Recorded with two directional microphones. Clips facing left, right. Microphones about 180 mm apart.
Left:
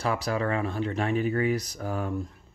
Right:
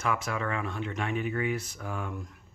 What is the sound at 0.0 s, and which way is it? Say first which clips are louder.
Speech: left 4 dB; 35° left (ahead or behind).